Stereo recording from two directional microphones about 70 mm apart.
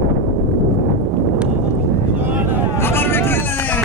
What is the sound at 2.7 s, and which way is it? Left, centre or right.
Vehicle, left.